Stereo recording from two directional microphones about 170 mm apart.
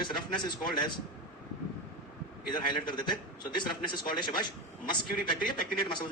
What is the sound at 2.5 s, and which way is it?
A man's voice, 25° left (ahead or behind).